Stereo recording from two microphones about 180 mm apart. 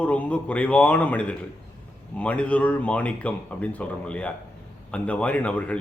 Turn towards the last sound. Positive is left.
turn(degrees=5)  # may be behind; listen again after turning